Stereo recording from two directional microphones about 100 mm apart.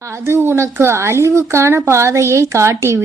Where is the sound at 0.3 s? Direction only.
25° right (ahead or behind).